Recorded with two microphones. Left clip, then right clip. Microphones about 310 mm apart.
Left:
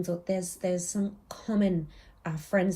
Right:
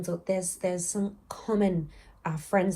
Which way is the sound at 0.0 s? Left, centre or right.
Centre.